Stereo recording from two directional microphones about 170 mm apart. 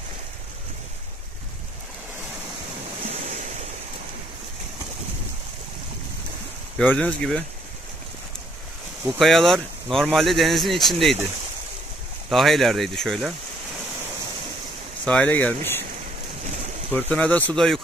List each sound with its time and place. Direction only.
3.1 s waves: 40° right (ahead or behind)
6.8 s speech: 10° left (ahead or behind)
9.2 s speech: centre (ahead or behind)
12.3 s speech: centre (ahead or behind)
15.0 s speech: 10° left (ahead or behind)
16.9 s speech: 10° left (ahead or behind)